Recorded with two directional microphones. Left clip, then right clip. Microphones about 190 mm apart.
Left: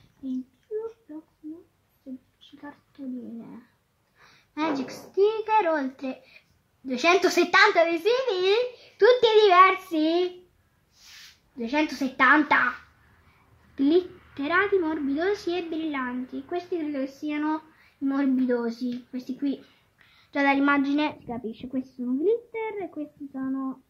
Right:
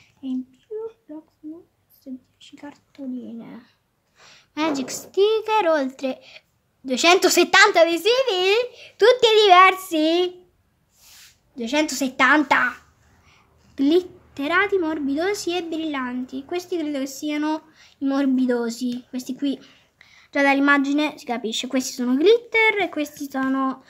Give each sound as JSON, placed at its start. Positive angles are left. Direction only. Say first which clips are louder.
{"t": 2.9, "sound": "a sound", "louder": "right 5 dB", "side_deg": -25}
{"t": 4.2, "sound": "a child's voice", "louder": "right 4 dB", "side_deg": -25}
{"t": 11.5, "sound": "a woman's voice", "louder": "right 4 dB", "side_deg": -30}
{"t": 13.7, "sound": "a woman's voice", "louder": "right 3 dB", "side_deg": -15}